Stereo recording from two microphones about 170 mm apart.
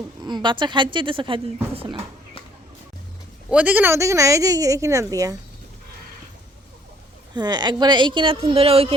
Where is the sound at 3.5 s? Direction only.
10° right (ahead or behind).